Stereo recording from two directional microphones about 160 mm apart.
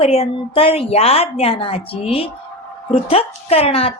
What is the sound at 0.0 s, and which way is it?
A woman's voice, 40° left (ahead or behind).